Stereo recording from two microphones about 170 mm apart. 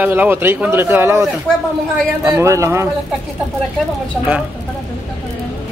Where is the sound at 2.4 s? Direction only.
15° right (ahead or behind).